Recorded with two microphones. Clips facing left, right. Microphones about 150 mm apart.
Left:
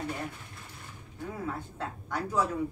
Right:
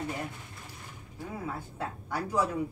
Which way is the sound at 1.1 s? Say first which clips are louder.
Left 1 dB; 10° right (ahead or behind).